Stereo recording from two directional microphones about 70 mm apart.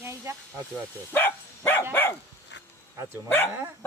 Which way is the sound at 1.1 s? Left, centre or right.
Left.